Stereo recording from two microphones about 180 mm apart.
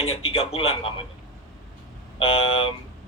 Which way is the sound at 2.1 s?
30° left (ahead or behind).